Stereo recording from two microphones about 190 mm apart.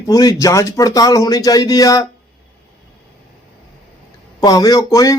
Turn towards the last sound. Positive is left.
turn(degrees=15)  # may be behind; listen again after turning